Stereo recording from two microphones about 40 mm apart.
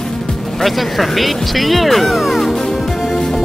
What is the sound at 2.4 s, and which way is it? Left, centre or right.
Music, centre.